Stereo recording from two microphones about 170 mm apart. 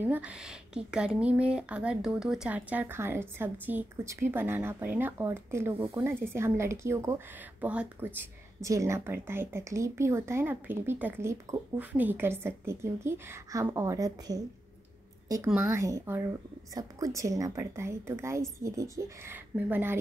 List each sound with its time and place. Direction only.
0.0 s a woman's voice: 10° right (ahead or behind)